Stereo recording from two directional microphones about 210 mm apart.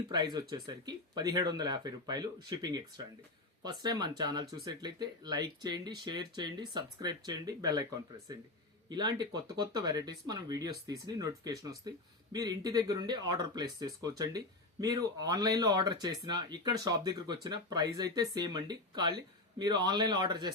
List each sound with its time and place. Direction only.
0.1 s speech: 20° right (ahead or behind)
8.9 s speech: 20° right (ahead or behind)